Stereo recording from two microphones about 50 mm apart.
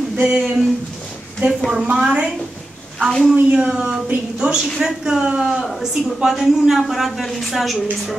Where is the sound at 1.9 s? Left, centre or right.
Centre.